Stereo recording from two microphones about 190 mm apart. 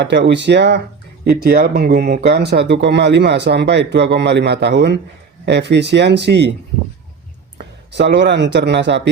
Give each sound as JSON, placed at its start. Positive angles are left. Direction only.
{"t": 0.0, "sound": "speech", "side_deg": -65}
{"t": 1.2, "sound": "speech", "side_deg": -55}
{"t": 7.6, "sound": "speech", "side_deg": -60}